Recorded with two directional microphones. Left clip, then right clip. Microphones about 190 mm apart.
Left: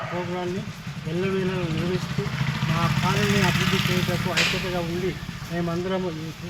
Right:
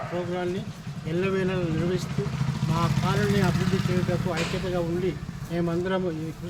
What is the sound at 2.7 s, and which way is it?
Speech, 15° right (ahead or behind).